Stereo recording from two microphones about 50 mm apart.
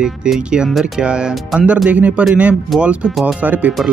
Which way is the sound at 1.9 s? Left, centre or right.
Right.